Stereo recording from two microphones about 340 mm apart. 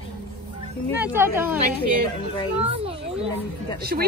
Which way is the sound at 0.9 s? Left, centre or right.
Centre.